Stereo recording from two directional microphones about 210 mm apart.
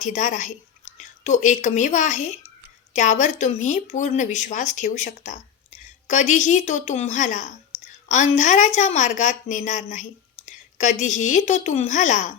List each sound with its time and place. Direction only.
0.0 s speech: 35° left (ahead or behind)